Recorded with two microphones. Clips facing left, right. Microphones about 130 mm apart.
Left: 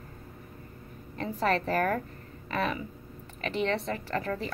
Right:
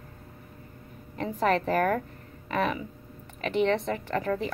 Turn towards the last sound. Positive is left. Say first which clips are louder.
# right 3 dB
turn(degrees=-15)  # may be behind; listen again after turning